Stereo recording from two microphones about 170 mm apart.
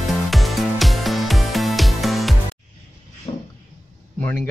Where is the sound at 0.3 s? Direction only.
Centre (ahead or behind).